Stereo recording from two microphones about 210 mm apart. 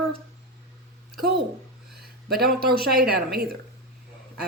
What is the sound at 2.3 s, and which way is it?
Speech, 45° right (ahead or behind).